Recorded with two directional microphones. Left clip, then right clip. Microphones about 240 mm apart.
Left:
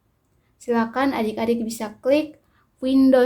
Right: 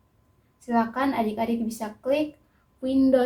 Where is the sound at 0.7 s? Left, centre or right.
Left.